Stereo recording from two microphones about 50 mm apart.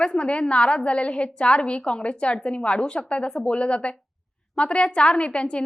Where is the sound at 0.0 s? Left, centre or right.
Left.